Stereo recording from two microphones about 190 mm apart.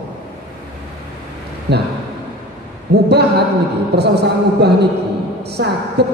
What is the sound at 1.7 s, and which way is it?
Speech, 60° right (ahead or behind).